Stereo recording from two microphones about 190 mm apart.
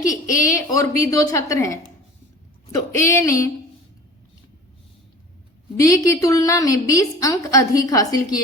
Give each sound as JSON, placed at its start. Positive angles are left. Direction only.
{"t": 0.0, "sound": "a woman's voice", "side_deg": 15}
{"t": 3.1, "sound": "a woman's voice", "side_deg": 15}
{"t": 5.7, "sound": "a woman's voice", "side_deg": 15}